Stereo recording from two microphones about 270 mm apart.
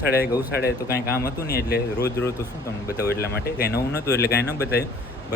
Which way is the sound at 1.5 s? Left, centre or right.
Left.